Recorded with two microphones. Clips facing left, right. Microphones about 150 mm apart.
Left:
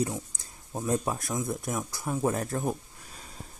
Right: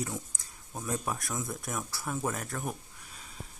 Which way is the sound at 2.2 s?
30° left (ahead or behind).